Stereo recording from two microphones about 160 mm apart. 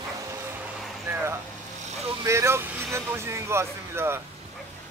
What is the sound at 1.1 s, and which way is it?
Speech, 15° right (ahead or behind).